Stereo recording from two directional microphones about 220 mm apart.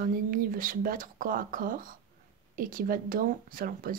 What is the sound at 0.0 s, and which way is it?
Speech, 40° right (ahead or behind).